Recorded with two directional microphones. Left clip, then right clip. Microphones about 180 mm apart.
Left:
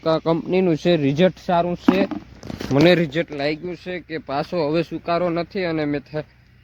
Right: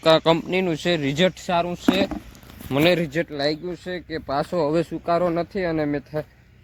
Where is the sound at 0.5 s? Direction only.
50° left (ahead or behind).